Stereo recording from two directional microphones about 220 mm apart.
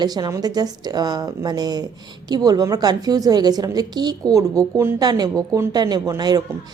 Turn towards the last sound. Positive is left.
turn(degrees=-20)  # may be behind; listen again after turning